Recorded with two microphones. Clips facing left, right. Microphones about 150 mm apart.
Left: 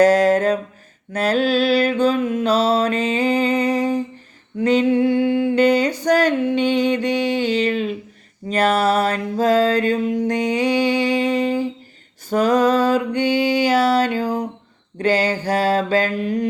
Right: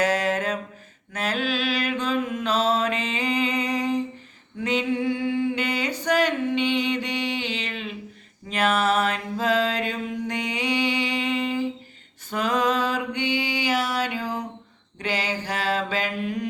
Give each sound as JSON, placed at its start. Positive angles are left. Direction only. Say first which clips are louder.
{"t": 0.0, "sound": "a sound", "louder": "left 10 dB", "side_deg": 40}
{"t": 1.1, "sound": "mantra", "louder": "left 9 dB", "side_deg": 35}
{"t": 4.6, "sound": "female singing", "louder": "left 9 dB", "side_deg": 40}
{"t": 4.9, "sound": "music", "louder": "left 8 dB", "side_deg": 60}
{"t": 5.5, "sound": "music", "louder": "left 11 dB", "side_deg": 40}
{"t": 8.4, "sound": "mantra", "louder": "left 5 dB", "side_deg": 35}
{"t": 14.0, "sound": "a sound", "louder": "left 8 dB", "side_deg": 40}
{"t": 14.9, "sound": "mantra", "louder": "left 9 dB", "side_deg": 45}